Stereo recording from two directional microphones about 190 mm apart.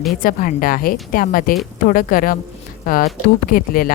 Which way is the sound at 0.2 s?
45° left (ahead or behind).